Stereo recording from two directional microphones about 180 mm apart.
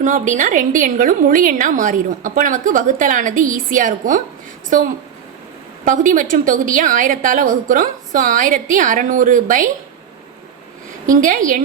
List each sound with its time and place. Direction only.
0.0 s a woman's voice: 45° right (ahead or behind)
5.8 s a woman's voice: 45° right (ahead or behind)
11.0 s a woman's voice: 45° right (ahead or behind)